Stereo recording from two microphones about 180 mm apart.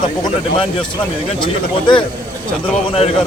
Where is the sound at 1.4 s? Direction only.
25° left (ahead or behind).